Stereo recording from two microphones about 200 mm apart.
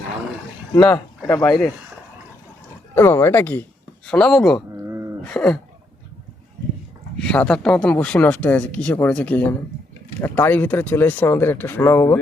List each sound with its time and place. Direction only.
0.7 s speech: 20° left (ahead or behind)
1.5 s speech: centre (ahead or behind)
2.9 s speech: 10° left (ahead or behind)
7.3 s speech: 5° left (ahead or behind)